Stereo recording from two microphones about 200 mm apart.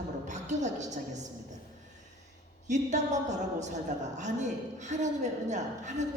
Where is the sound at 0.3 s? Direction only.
35° right (ahead or behind).